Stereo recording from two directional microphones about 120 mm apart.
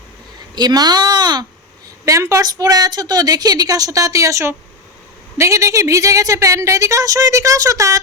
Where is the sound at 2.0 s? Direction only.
25° right (ahead or behind).